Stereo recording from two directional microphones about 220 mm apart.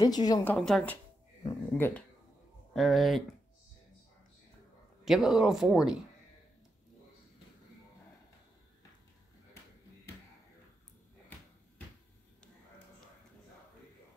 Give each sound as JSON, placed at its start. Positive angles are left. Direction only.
{"t": 0.0, "sound": "a woman's voice", "side_deg": 15}
{"t": 1.4, "sound": "a woman's voice", "side_deg": 10}
{"t": 5.0, "sound": "speech", "side_deg": 0}